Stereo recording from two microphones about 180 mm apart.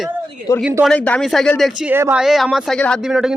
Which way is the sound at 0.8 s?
5° left (ahead or behind).